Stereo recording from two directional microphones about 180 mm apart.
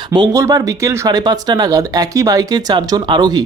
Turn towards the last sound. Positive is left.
turn(degrees=-25)  # may be behind; listen again after turning